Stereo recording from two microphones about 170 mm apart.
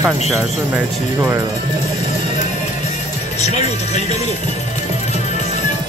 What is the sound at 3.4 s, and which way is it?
Speech, 40° left (ahead or behind).